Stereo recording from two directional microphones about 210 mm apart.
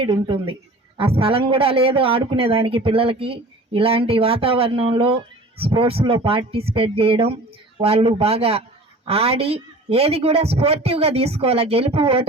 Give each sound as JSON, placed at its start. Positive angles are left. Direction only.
{"t": 0.0, "sound": "speech", "side_deg": -25}